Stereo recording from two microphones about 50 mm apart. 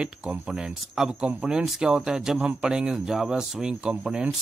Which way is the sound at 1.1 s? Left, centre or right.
Right.